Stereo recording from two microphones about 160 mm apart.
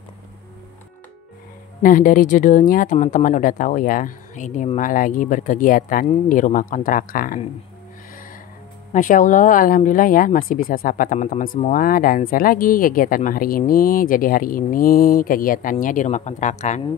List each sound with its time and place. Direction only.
1.8 s speech: 60° left (ahead or behind)
8.9 s speech: 55° left (ahead or behind)